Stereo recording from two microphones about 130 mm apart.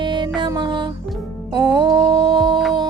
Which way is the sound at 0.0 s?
35° right (ahead or behind).